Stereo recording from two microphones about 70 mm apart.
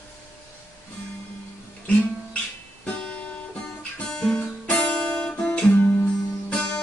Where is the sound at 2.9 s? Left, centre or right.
Centre.